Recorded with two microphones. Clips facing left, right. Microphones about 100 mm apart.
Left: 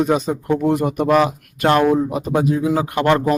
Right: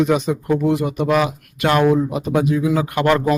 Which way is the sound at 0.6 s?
50° left (ahead or behind).